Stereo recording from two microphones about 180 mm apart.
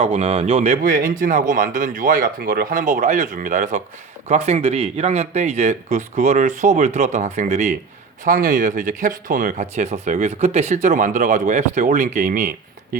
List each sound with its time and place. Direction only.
0.0 s speech: 35° right (ahead or behind)